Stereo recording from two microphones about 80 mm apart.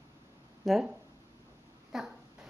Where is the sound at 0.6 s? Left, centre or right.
Centre.